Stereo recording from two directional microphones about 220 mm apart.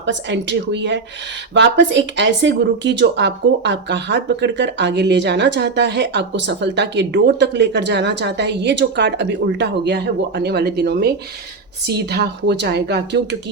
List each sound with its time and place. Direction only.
0.0 s speech: 55° right (ahead or behind)